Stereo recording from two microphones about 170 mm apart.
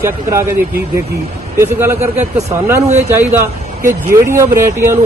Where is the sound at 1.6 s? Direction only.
15° right (ahead or behind).